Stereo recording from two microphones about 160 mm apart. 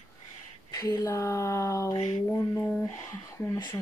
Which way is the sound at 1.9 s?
45° left (ahead or behind).